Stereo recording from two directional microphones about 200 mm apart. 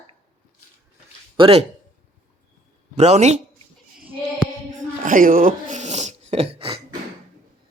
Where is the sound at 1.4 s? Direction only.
30° right (ahead or behind).